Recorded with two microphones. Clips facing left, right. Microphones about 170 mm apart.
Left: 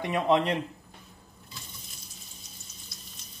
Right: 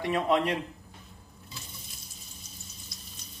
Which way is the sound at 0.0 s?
20° left (ahead or behind).